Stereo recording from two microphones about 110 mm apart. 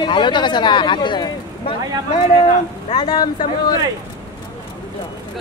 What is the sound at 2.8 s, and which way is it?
Speech, 50° left (ahead or behind).